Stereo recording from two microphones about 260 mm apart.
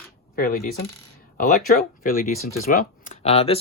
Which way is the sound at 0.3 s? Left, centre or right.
Left.